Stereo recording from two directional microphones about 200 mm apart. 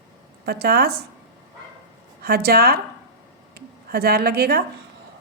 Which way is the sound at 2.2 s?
50° right (ahead or behind).